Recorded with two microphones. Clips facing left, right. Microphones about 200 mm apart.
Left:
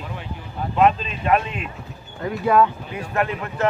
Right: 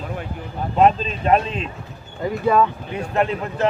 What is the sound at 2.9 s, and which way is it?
Speech, 25° right (ahead or behind).